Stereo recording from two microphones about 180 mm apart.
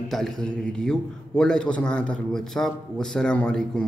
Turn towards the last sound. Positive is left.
turn(degrees=5)  # may be behind; listen again after turning